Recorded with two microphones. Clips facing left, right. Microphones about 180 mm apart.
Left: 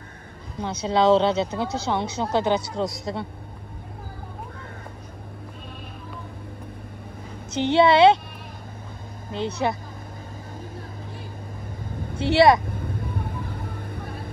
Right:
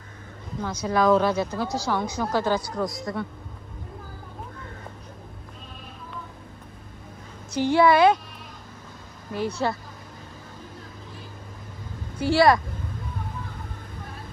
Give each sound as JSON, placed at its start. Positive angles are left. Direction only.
{"t": 0.8, "sound": "speech", "side_deg": 25}
{"t": 7.5, "sound": "speech", "side_deg": 25}
{"t": 9.3, "sound": "speech", "side_deg": 20}
{"t": 12.2, "sound": "speech", "side_deg": 20}